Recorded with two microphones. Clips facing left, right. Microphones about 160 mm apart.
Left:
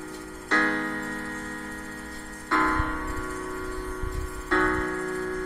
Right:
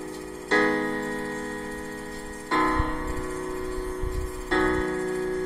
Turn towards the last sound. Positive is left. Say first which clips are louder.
# right 3 dB
turn(degrees=-30)  # may be behind; listen again after turning